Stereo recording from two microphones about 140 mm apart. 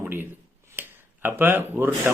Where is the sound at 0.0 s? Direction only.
15° right (ahead or behind).